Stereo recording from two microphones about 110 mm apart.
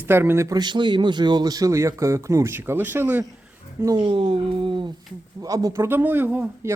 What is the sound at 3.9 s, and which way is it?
Speech, 50° right (ahead or behind).